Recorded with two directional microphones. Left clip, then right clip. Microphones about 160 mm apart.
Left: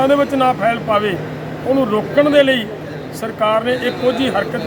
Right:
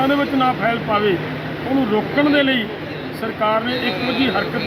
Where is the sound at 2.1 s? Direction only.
25° left (ahead or behind).